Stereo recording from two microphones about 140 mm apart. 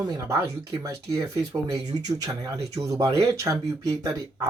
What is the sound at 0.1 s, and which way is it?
Speech, 25° right (ahead or behind).